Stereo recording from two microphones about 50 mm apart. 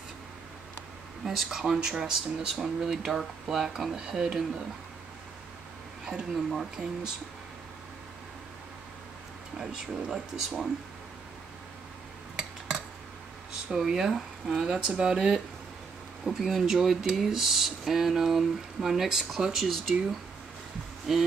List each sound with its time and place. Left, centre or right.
1.2 s speech: centre
6.0 s speech: centre
9.6 s speech: centre
12.4 s a sound: centre
13.7 s speech: centre
14.5 s speech: centre